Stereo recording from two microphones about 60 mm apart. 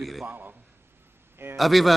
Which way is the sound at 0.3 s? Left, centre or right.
Right.